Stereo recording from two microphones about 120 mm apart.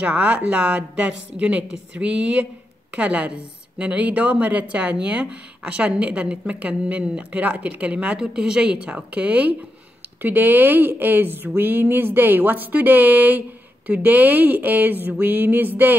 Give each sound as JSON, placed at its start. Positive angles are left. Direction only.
{"t": 0.0, "sound": "a woman's voice", "side_deg": -10}